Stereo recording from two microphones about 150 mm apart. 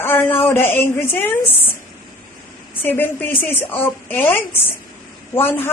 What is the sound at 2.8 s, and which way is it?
A woman's voice, 15° left (ahead or behind).